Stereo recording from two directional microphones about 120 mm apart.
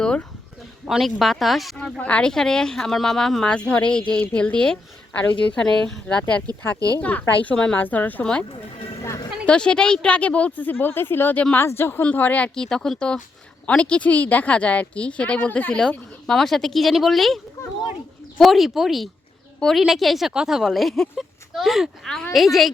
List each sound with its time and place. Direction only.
0.0 s a sound: 10° left (ahead or behind)
0.9 s speech: centre (ahead or behind)
2.0 s speech: 10° left (ahead or behind)
6.7 s speech: 30° right (ahead or behind)
7.0 s speech: 10° left (ahead or behind)
9.0 s a sound: 25° left (ahead or behind)
9.5 s speech: 5° left (ahead or behind)